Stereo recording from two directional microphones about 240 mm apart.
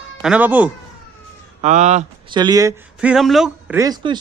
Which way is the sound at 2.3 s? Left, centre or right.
Centre.